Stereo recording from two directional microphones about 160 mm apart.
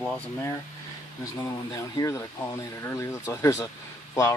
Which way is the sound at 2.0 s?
20° left (ahead or behind).